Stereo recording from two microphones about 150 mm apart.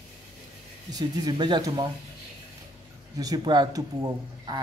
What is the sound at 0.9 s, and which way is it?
Speech, 25° right (ahead or behind).